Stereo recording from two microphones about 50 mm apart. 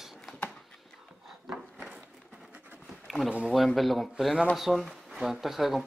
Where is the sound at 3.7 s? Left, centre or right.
Centre.